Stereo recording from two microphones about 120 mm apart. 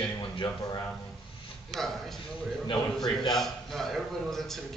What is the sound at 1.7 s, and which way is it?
A man's voice, 5° left (ahead or behind).